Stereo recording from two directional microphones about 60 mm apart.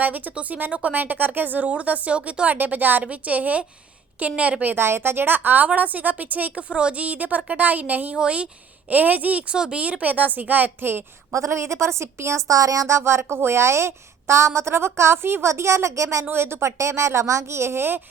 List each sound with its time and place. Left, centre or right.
0.0 s a woman's voice: right
4.7 s a woman's voice: right; by 8.4 s centre
8.9 s a woman's voice: right
11.3 s a woman's voice: right
16.2 s a woman's voice: right